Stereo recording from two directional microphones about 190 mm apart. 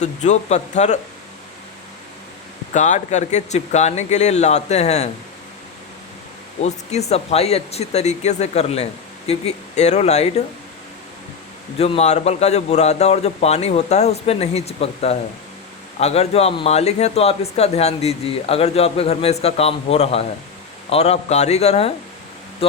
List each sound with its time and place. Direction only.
0.0 s speech: 40° left (ahead or behind)
2.7 s speech: 40° left (ahead or behind)
6.6 s speech: 35° left (ahead or behind)
11.8 s speech: 35° left (ahead or behind)